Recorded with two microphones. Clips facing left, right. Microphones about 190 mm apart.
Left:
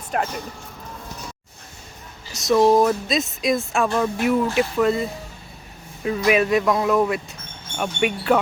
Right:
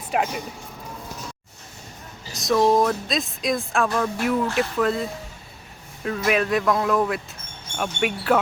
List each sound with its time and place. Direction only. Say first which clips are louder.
0.1 s speech: right 1 dB; 5° right (ahead or behind)
2.3 s speech: left 3 dB; centre (ahead or behind)
6.1 s speech: left 3 dB; 5° left (ahead or behind)